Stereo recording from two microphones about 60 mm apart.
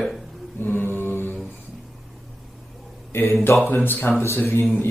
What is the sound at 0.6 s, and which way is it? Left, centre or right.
A capella, left.